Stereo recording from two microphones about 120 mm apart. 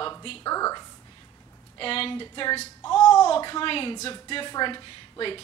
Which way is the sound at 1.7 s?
50° left (ahead or behind).